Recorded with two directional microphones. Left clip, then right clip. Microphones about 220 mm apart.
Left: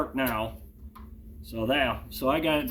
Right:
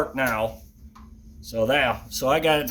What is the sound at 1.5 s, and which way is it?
Speech, 35° right (ahead or behind).